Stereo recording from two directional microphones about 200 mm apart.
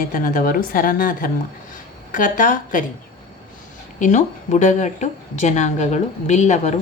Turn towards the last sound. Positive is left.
turn(degrees=35)  # may be behind; listen again after turning